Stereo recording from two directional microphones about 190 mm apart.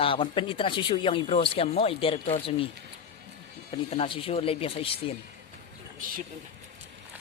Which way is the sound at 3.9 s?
30° left (ahead or behind).